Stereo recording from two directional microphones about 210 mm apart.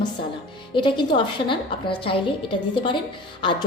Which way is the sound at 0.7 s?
20° left (ahead or behind).